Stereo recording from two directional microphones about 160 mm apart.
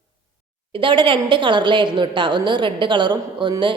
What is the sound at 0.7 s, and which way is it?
A woman's voice, 30° right (ahead or behind).